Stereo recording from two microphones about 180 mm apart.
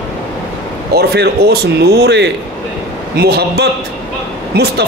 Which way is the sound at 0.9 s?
65° right (ahead or behind).